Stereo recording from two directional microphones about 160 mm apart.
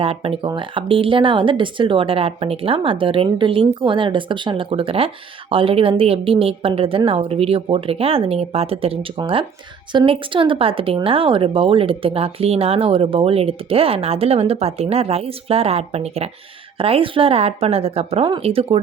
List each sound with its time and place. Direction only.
0.0 s speech: 35° right (ahead or behind)